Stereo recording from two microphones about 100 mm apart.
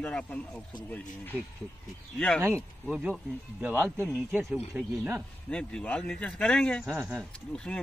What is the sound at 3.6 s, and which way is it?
Speech, 20° right (ahead or behind).